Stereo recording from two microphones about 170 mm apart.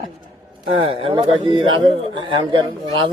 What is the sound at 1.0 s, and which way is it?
A man's voice, 30° right (ahead or behind).